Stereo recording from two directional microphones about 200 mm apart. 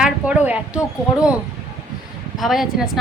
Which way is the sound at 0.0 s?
5° right (ahead or behind).